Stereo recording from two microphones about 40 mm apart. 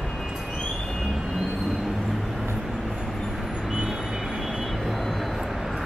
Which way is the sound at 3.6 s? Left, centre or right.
Centre.